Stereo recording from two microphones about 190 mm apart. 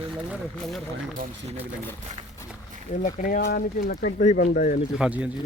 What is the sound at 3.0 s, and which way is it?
Speech, 45° left (ahead or behind).